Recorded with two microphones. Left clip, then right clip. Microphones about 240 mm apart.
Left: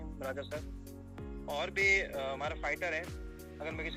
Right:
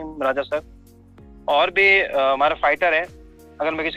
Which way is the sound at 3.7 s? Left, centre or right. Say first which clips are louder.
Right 16 dB; centre.